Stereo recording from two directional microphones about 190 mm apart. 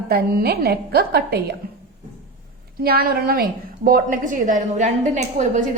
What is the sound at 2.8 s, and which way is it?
A woman's voice, 50° right (ahead or behind).